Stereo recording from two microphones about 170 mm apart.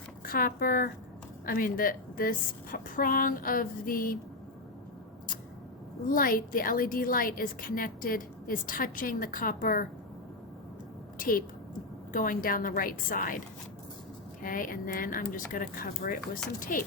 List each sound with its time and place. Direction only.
0.3 s a woman's voice: 60° left (ahead or behind)
6.1 s a woman's voice: 55° left (ahead or behind)
11.2 s a woman's voice: 55° left (ahead or behind)
14.4 s a woman's voice: 55° left (ahead or behind)